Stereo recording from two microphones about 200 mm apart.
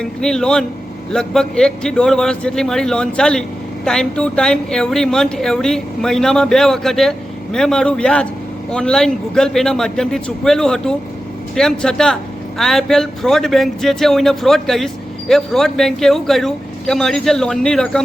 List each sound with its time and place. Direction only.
0.0 s a woman's voice: 5° left (ahead or behind)